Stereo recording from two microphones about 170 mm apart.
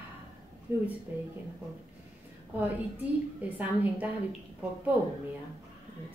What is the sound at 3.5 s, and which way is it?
Speech, 10° right (ahead or behind).